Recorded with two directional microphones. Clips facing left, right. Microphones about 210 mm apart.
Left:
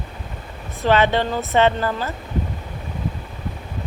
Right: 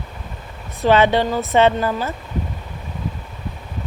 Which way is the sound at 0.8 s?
15° right (ahead or behind).